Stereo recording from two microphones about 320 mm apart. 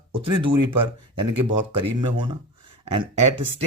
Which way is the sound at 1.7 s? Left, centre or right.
Centre.